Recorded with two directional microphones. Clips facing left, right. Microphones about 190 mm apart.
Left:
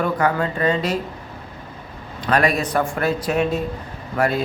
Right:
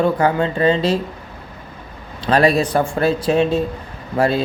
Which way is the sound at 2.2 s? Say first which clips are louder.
Right 4 dB; 30° right (ahead or behind).